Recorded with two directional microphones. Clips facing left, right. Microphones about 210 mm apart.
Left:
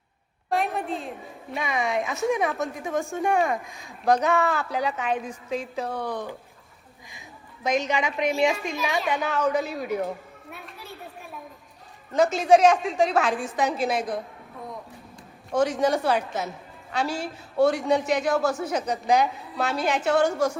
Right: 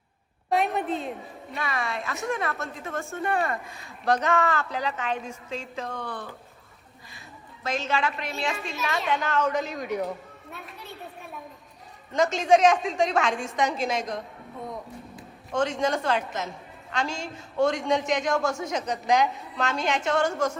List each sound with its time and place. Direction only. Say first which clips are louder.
0.5 s a woman's voice: right 1 dB; centre (ahead or behind)
1.6 s speech: left 5 dB; 15° left (ahead or behind)
3.0 s a man's voice: left 3 dB; centre (ahead or behind)
3.8 s speech: left 3 dB; 10° left (ahead or behind)
7.6 s speech: left 3 dB; 15° left (ahead or behind)
8.7 s a man's voice: left 2 dB; centre (ahead or behind)
10.5 s children playing: even; centre (ahead or behind)
12.1 s a man's voice: left 2 dB; 5° left (ahead or behind)
15.5 s a man's voice: left 3 dB; 10° left (ahead or behind)